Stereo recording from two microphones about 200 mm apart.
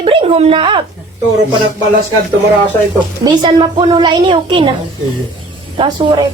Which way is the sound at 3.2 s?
25° right (ahead or behind).